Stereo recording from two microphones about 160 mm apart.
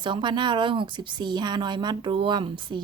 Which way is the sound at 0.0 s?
30° right (ahead or behind).